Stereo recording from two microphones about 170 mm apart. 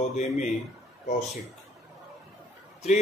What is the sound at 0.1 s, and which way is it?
Speech, 40° left (ahead or behind).